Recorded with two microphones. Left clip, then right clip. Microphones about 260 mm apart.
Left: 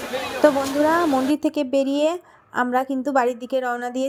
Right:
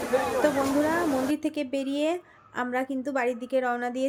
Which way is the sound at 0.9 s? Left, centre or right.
Left.